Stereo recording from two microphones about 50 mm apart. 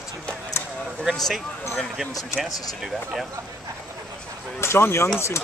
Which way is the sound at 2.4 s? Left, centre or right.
Centre.